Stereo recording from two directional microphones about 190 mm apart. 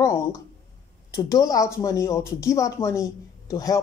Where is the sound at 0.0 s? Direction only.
15° left (ahead or behind).